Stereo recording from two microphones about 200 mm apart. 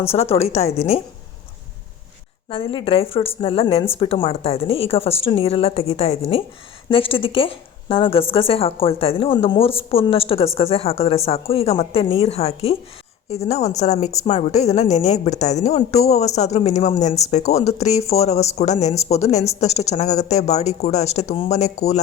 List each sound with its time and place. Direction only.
0.1 s a woman's voice: 30° left (ahead or behind)
2.5 s a woman's voice: 25° left (ahead or behind)